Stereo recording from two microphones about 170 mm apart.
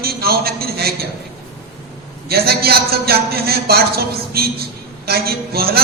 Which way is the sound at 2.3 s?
65° right (ahead or behind).